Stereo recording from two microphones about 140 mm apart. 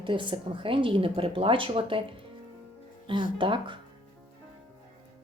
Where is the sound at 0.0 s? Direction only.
35° right (ahead or behind).